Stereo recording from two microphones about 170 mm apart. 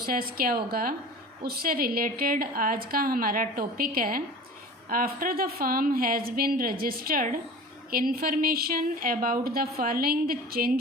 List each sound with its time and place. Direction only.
0.0 s a woman's voice: 60° right (ahead or behind)